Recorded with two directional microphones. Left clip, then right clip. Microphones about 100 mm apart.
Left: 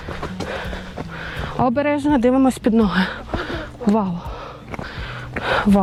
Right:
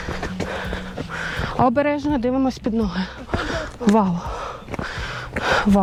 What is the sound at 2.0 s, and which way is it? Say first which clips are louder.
Speech: left 5 dB; 75° left (ahead or behind).